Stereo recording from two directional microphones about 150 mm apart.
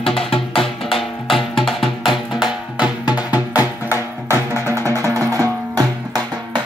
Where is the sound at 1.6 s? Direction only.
Centre (ahead or behind).